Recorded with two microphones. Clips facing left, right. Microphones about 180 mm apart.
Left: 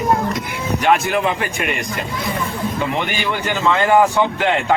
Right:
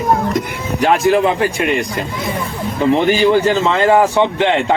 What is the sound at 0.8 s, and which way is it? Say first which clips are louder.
Speech: right 5 dB; 35° right (ahead or behind).